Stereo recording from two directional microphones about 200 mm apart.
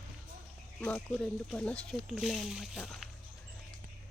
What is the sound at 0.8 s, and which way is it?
Speech, 5° left (ahead or behind).